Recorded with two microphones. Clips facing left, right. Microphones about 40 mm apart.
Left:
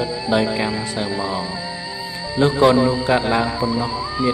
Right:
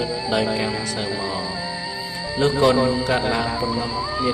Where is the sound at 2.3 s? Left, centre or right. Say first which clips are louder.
Left 3 dB; centre.